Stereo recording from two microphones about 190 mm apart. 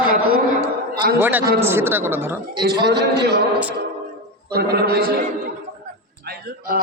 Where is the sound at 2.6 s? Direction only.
60° right (ahead or behind).